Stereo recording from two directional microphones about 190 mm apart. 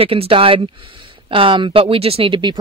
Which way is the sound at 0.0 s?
30° right (ahead or behind).